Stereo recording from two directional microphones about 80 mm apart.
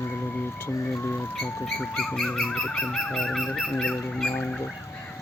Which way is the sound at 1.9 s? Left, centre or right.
Centre.